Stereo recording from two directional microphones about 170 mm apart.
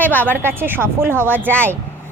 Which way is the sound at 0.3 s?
10° right (ahead or behind).